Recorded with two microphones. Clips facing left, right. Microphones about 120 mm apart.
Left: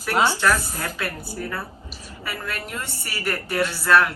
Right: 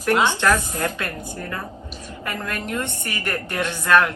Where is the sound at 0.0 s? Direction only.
10° left (ahead or behind).